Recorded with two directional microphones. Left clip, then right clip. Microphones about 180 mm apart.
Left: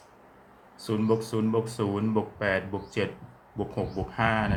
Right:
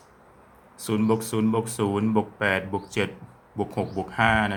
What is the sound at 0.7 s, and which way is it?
Speech, 30° right (ahead or behind).